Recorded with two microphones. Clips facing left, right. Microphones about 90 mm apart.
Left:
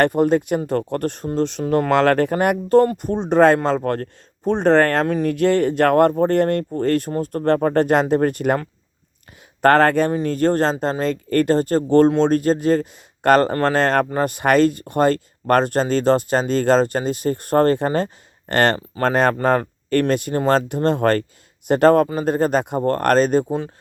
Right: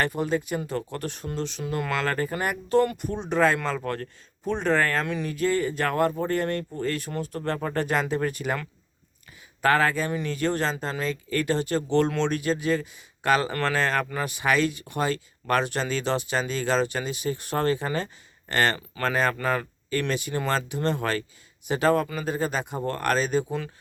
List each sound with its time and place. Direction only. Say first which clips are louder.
0.0 s speech: left 10 dB; 55° left (ahead or behind)
1.9 s speech: left 12 dB; 65° left (ahead or behind)
2.3 s speech: left 8 dB; 55° left (ahead or behind)
5.0 s speech: left 9 dB; 45° left (ahead or behind)
5.3 s speech: left 6 dB; 65° left (ahead or behind)
9.6 s speech: left 8 dB; 60° left (ahead or behind)
10.1 s speech: left 8 dB; 40° left (ahead or behind)